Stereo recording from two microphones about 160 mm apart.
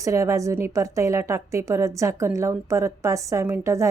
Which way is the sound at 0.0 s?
20° right (ahead or behind).